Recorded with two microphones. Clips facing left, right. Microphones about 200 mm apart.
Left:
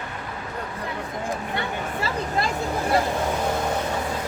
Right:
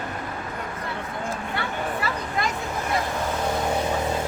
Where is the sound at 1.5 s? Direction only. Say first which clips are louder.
Even; 25° left (ahead or behind).